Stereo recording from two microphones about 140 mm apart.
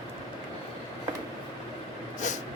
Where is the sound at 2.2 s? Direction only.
60° left (ahead or behind).